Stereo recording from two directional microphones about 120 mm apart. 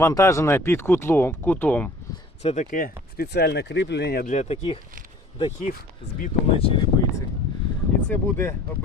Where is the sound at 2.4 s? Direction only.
80° left.